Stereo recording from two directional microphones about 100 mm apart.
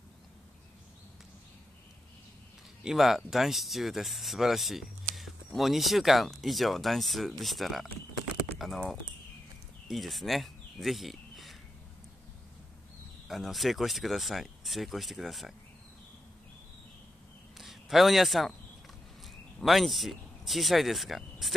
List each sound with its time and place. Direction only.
2.8 s speech: 5° right (ahead or behind)
13.3 s speech: centre (ahead or behind)
17.6 s a man's voice: centre (ahead or behind)